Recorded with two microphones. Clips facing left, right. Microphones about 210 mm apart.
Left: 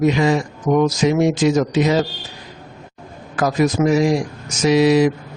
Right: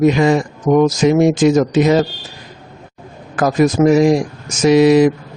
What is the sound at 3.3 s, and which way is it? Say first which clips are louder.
A man's voice: right 4 dB; 50° right (ahead or behind).